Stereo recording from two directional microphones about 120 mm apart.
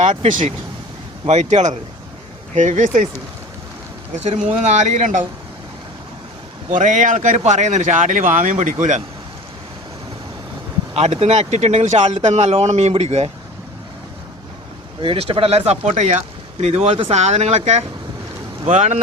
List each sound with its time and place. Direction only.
1.2 s speech: 70° right (ahead or behind)
2.6 s speech: 90° right
4.2 s speech: 70° right (ahead or behind); by 5.2 s 85° right
6.7 s speech: 90° right
10.9 s speech: 60° right (ahead or behind)
15.0 s speech: 50° right (ahead or behind); by 18.9 s 80° right